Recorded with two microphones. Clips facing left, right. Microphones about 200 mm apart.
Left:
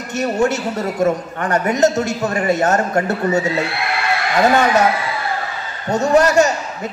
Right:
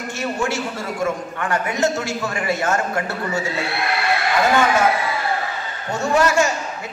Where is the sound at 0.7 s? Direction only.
40° left (ahead or behind).